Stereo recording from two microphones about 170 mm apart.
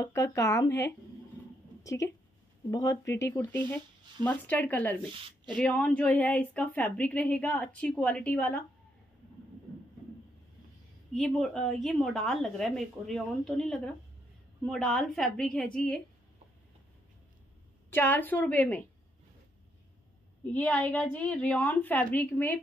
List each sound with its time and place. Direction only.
0.0 s a woman's voice: 15° left (ahead or behind)
11.1 s a woman's voice: centre (ahead or behind)
17.8 s a woman's voice: 10° left (ahead or behind)
20.5 s a woman's voice: 10° left (ahead or behind)